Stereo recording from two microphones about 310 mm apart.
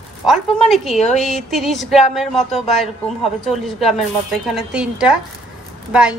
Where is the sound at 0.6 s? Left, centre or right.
Centre.